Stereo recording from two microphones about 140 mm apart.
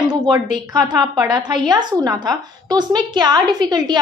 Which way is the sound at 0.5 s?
30° right (ahead or behind).